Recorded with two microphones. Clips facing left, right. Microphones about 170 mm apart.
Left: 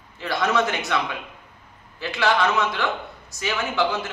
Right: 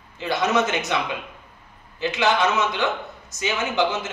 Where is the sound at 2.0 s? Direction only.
20° right (ahead or behind).